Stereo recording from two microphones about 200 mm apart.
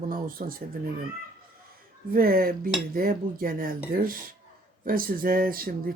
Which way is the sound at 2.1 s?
45° right (ahead or behind).